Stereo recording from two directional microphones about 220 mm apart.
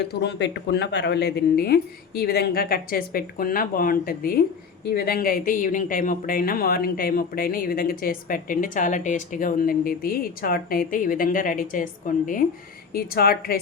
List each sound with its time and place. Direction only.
0.0 s speech: 50° left (ahead or behind)